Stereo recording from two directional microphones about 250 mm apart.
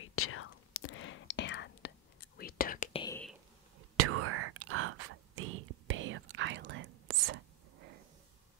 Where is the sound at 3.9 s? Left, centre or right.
Right.